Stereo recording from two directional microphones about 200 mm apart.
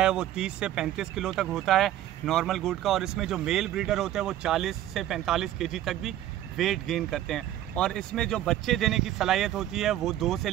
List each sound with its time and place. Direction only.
0.0 s speech: 5° right (ahead or behind)